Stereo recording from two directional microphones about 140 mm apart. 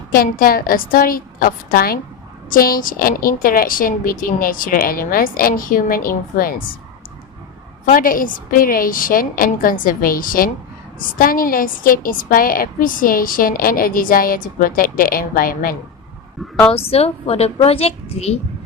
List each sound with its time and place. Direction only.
0.1 s a woman's voice: 90° left
7.9 s a woman's voice: 80° left
16.7 s a child's voice: 45° left (ahead or behind)